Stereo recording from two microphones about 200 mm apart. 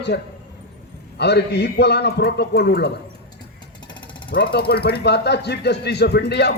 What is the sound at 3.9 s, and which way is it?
Vehicle, 20° left (ahead or behind).